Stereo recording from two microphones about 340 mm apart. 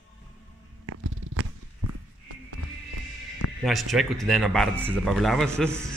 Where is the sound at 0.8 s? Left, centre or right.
Right.